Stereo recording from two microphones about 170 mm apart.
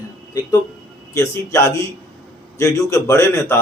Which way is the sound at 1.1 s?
15° left (ahead or behind).